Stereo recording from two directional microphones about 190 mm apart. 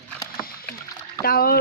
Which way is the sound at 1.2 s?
50° left (ahead or behind).